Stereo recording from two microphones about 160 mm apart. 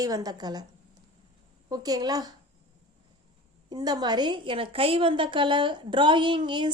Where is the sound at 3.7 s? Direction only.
25° right (ahead or behind).